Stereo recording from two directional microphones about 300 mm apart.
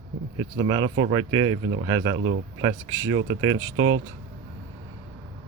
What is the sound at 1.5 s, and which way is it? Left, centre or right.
Speech, right.